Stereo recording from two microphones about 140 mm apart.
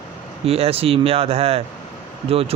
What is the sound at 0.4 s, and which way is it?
Speech, 45° right (ahead or behind).